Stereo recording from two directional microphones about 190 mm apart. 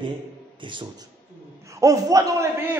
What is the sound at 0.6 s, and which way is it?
A man's voice, 25° right (ahead or behind).